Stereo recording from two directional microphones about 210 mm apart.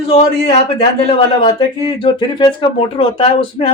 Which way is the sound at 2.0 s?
20° left (ahead or behind).